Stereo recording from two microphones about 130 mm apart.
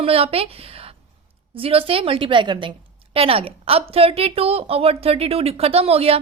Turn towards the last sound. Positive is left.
turn(degrees=-50)  # may be behind; listen again after turning